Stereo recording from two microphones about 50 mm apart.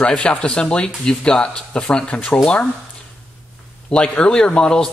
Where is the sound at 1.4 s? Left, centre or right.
Left.